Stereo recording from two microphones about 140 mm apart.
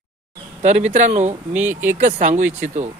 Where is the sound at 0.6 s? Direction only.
55° right (ahead or behind).